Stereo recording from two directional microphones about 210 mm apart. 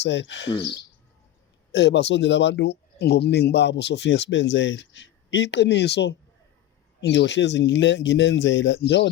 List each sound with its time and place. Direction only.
0.0 s speech: 55° left (ahead or behind)
1.7 s speech: 55° left (ahead or behind)